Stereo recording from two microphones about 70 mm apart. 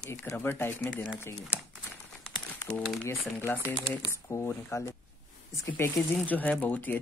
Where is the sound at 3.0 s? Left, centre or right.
Left.